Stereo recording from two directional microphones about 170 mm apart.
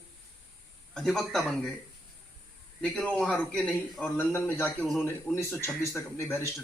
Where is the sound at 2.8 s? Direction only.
5° left (ahead or behind).